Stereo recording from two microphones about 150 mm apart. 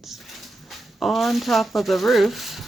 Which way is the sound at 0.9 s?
Centre (ahead or behind).